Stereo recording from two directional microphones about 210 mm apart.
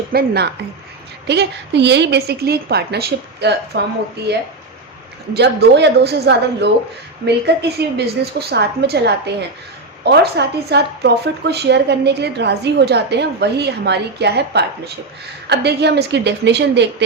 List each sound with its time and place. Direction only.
0.1 s speech: 50° right (ahead or behind)